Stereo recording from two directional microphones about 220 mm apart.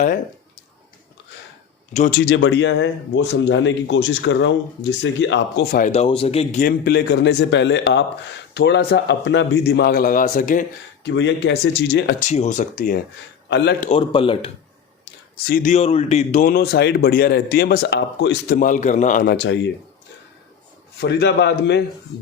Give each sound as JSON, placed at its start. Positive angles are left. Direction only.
{"t": 1.9, "sound": "speech", "side_deg": 30}
{"t": 2.1, "sound": "speech", "side_deg": 50}
{"t": 5.8, "sound": "speech", "side_deg": 30}
{"t": 11.0, "sound": "speech", "side_deg": 55}
{"t": 12.2, "sound": "speech", "side_deg": 30}
{"t": 13.5, "sound": "speech", "side_deg": 50}
{"t": 13.9, "sound": "speech", "side_deg": 25}
{"t": 15.4, "sound": "speech", "side_deg": 40}
{"t": 21.0, "sound": "speech", "side_deg": 50}